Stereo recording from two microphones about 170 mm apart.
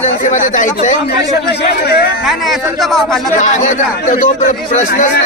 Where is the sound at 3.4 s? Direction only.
45° left (ahead or behind).